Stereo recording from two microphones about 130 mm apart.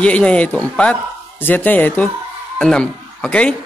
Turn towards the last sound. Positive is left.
turn(degrees=10)  # may be behind; listen again after turning